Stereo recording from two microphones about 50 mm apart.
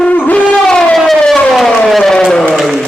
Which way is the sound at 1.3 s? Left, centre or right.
Centre.